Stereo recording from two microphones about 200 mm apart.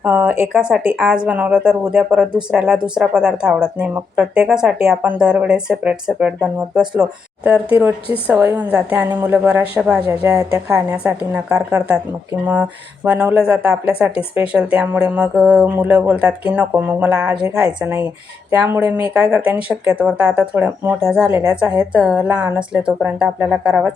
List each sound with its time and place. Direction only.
0.0 s speech: 10° right (ahead or behind)